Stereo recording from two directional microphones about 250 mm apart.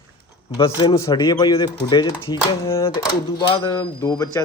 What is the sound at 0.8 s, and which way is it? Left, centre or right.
Speech, centre.